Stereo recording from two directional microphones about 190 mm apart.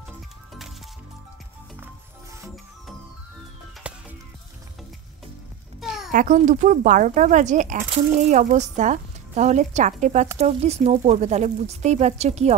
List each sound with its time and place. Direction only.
3.8 s music: 5° right (ahead or behind)
6.1 s speech: 40° right (ahead or behind)